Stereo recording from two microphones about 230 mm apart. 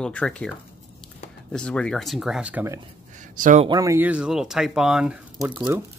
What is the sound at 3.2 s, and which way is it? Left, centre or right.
Speech, right.